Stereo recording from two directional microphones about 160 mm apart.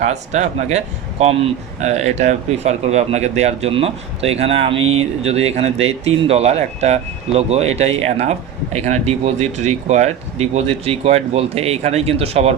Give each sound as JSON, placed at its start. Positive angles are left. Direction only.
{"t": 0.0, "sound": "speech", "side_deg": -45}